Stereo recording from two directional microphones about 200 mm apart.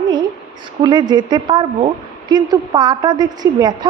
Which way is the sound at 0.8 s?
20° right (ahead or behind).